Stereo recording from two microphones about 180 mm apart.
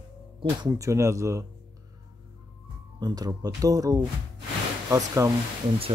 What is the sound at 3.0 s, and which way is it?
Speech, 20° right (ahead or behind).